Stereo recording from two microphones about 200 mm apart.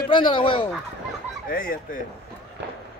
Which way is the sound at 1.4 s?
45° left (ahead or behind).